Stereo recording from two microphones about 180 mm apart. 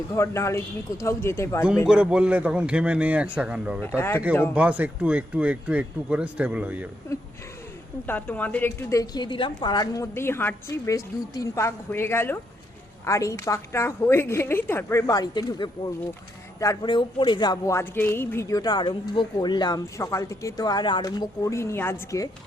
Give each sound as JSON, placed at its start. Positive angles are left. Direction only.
{"t": 0.1, "sound": "a woman's voice", "side_deg": 15}
{"t": 1.9, "sound": "speech", "side_deg": -5}
{"t": 3.8, "sound": "a woman's voice", "side_deg": 10}
{"t": 4.5, "sound": "speech", "side_deg": -10}
{"t": 8.0, "sound": "a woman's voice", "side_deg": 10}